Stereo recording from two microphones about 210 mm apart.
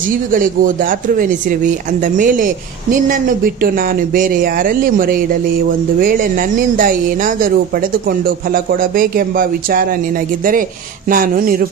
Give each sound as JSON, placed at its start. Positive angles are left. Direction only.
{"t": 0.3, "sound": "speech", "side_deg": -40}
{"t": 11.1, "sound": "speech", "side_deg": -40}